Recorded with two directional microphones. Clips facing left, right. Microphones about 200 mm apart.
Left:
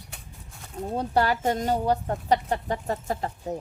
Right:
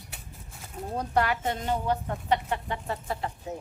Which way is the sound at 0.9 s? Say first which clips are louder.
Left 3 dB; 30° left (ahead or behind).